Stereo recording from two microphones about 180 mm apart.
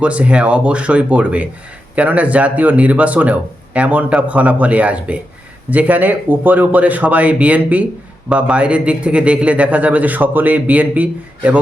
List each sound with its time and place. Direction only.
0.0 s a man's voice: 5° right (ahead or behind)